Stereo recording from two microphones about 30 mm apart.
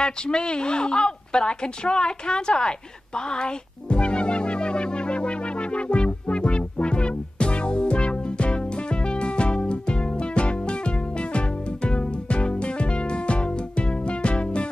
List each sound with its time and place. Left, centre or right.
0.0 s speech: left
3.2 s music: left